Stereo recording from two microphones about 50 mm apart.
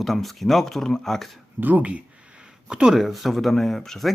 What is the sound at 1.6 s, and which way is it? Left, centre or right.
Speech, right.